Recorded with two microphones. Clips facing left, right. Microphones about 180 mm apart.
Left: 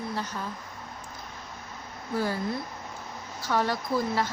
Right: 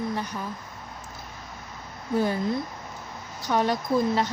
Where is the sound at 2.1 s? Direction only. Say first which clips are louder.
Right 4 dB; 20° right (ahead or behind).